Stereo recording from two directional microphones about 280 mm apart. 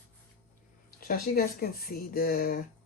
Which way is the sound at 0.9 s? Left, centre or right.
Left.